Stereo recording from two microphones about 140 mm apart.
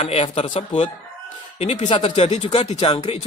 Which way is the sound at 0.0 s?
45° left (ahead or behind).